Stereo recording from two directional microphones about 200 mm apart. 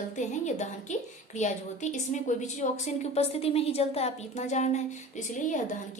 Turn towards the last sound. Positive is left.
turn(degrees=40)  # may be behind; listen again after turning